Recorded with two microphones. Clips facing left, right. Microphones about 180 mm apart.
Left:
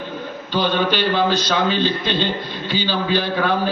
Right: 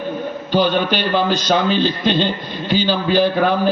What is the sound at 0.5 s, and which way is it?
A man's voice, 45° right (ahead or behind).